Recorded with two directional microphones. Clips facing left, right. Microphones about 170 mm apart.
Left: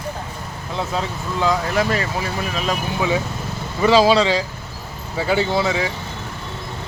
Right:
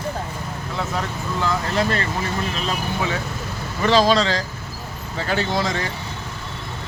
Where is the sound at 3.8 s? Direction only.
10° left (ahead or behind).